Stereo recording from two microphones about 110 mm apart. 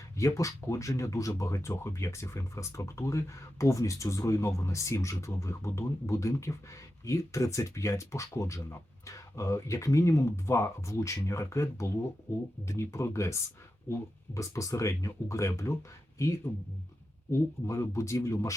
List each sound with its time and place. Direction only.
0.2 s speech: 30° left (ahead or behind)
17.7 s speech: 25° left (ahead or behind)